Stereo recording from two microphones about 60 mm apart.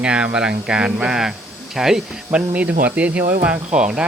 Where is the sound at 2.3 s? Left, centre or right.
Right.